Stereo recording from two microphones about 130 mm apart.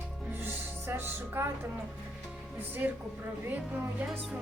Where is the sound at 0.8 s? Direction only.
15° right (ahead or behind).